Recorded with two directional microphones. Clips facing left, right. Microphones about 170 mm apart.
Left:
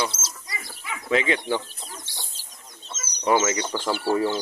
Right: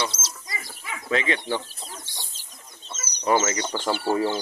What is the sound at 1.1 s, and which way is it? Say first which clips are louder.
Speech: left 2 dB; 20° left (ahead or behind).